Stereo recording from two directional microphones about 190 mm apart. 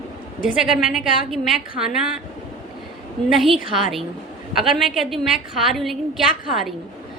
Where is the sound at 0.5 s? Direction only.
Centre (ahead or behind).